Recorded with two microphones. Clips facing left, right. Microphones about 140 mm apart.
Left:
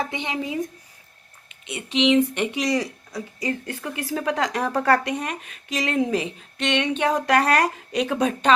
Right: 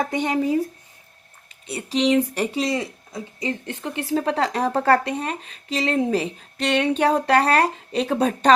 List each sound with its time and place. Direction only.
0.0 s speech: 45° right (ahead or behind)